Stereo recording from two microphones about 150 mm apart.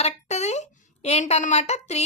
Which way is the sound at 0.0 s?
50° left (ahead or behind).